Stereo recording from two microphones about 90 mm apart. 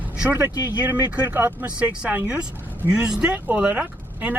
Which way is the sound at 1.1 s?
20° right (ahead or behind).